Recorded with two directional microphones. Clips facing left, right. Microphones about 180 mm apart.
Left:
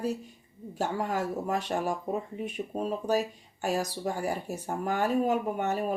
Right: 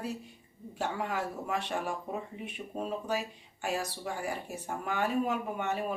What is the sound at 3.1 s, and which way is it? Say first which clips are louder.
Speech: left 6 dB; 40° left (ahead or behind).